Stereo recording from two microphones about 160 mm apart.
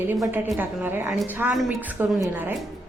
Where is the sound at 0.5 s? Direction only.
15° right (ahead or behind).